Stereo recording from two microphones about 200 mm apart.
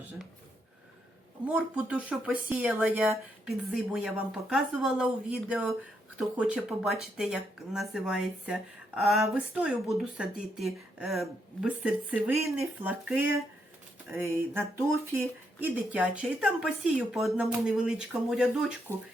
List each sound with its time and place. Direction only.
1.5 s speech: 5° right (ahead or behind)
18.9 s speech: 10° left (ahead or behind)